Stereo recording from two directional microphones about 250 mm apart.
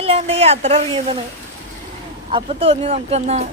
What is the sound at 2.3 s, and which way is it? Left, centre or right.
A woman's voice, right.